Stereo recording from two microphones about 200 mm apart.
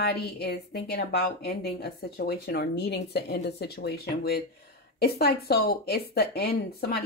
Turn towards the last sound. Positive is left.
turn(degrees=50)  # may be behind; listen again after turning